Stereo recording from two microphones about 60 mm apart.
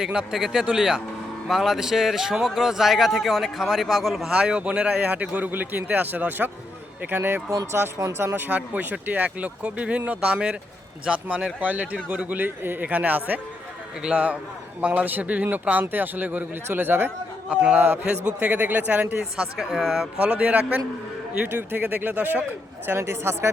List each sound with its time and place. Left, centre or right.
0.0 s a man's voice: centre
4.3 s speech: centre; by 7.4 s right
7.7 s speech: right
8.4 s speech: right
17.5 s speech: centre
17.7 s speech: right
18.3 s speech: right
19.5 s a man's voice: centre
20.1 s speech: right
22.9 s speech: right